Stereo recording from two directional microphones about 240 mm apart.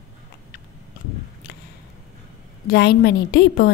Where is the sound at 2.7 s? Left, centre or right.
Left.